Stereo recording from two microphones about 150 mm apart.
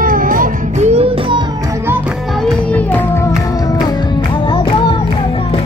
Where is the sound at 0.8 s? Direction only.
40° right (ahead or behind).